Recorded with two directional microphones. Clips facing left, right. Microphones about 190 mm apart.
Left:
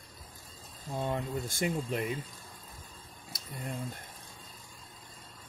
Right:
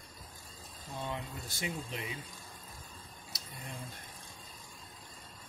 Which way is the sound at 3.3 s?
50° left (ahead or behind).